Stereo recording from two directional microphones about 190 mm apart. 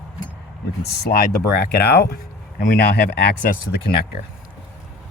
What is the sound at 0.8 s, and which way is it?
Speech, 60° left (ahead or behind).